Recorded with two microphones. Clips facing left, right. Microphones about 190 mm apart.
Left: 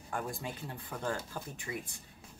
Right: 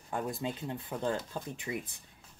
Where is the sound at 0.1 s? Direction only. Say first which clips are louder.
Right 4 dB; 20° right (ahead or behind).